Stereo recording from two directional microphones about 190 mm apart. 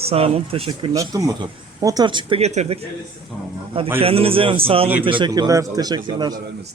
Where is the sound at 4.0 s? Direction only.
30° right (ahead or behind).